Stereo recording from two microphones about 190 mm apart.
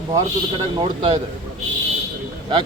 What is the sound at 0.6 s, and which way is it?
Speech, 25° right (ahead or behind).